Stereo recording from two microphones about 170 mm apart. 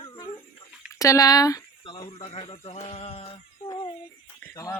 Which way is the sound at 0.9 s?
20° left (ahead or behind).